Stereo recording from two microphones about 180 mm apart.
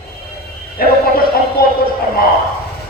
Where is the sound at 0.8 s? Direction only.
55° left (ahead or behind).